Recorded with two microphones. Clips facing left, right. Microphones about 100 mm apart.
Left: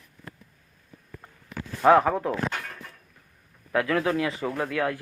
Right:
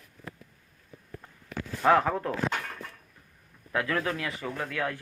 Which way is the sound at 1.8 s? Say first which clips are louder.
Left 4 dB; 15° left (ahead or behind).